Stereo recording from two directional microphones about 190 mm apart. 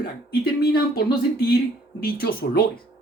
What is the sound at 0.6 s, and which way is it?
A man's voice, 55° left (ahead or behind).